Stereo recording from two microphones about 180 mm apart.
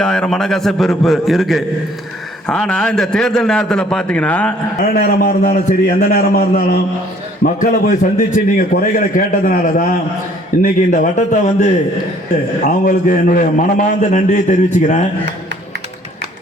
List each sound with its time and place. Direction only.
0.0 s a man's voice: 5° left (ahead or behind)
4.8 s a man's voice: 60° left (ahead or behind)